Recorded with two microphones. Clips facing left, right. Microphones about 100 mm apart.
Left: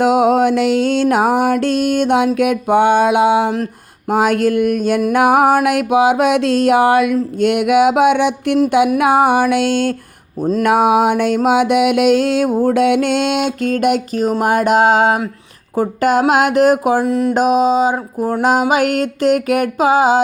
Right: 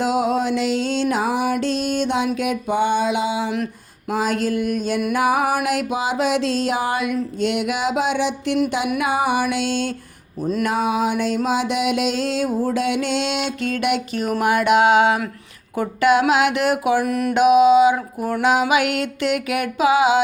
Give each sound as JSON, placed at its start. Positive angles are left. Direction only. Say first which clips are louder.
{"t": 0.0, "sound": "music", "louder": "left 8 dB", "side_deg": 55}
{"t": 17.0, "sound": "mantra", "louder": "left 5 dB", "side_deg": 20}
{"t": 17.3, "sound": "music", "louder": "right 3 dB", "side_deg": 40}